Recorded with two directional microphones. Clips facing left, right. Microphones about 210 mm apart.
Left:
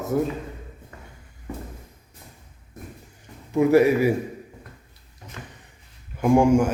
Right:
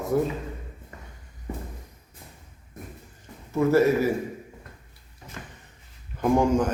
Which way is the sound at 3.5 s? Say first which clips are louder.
Left 3 dB; 15° left (ahead or behind).